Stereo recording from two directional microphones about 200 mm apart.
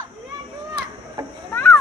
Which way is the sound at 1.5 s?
10° left (ahead or behind).